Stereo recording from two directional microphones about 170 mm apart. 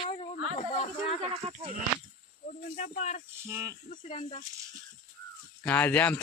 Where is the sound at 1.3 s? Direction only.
35° right (ahead or behind).